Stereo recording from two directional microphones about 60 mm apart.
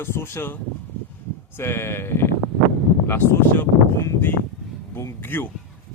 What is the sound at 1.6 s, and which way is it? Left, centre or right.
Speech, left.